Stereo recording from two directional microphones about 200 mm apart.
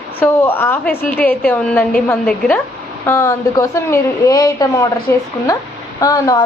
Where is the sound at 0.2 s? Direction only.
10° left (ahead or behind).